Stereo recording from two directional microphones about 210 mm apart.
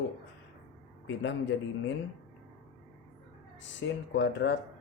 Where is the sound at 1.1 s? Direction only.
60° left (ahead or behind).